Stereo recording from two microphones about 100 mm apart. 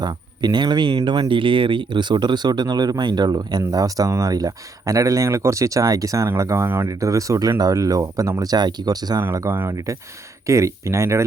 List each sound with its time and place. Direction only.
0.0 s speech: 45° right (ahead or behind)
9.2 s speech: 25° right (ahead or behind)